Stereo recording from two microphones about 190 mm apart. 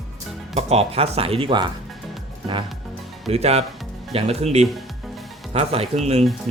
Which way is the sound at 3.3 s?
35° right (ahead or behind).